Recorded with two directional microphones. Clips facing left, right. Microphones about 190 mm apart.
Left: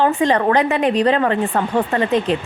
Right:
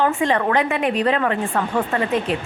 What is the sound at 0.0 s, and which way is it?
A woman's voice, 35° left (ahead or behind).